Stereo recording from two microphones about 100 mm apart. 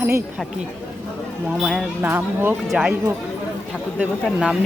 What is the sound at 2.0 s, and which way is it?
Speech, 20° right (ahead or behind).